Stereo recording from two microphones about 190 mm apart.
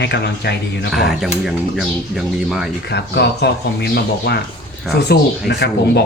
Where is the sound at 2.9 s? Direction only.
60° left (ahead or behind).